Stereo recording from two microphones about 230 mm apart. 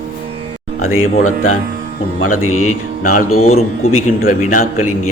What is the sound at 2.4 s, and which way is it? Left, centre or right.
Speech, left.